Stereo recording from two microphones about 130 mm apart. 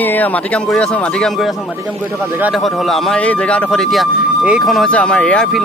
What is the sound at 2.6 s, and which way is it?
Speech, centre (ahead or behind).